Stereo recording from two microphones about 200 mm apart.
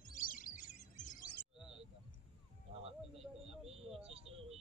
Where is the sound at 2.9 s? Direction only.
30° right (ahead or behind).